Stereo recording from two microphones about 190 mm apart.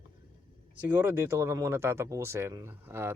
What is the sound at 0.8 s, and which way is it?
Speech, 10° right (ahead or behind).